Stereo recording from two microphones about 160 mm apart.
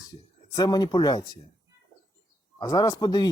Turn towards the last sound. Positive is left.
turn(degrees=25)  # may be behind; listen again after turning